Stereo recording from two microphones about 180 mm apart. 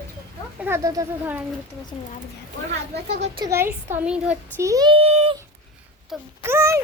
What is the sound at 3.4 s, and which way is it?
Speech, 15° right (ahead or behind).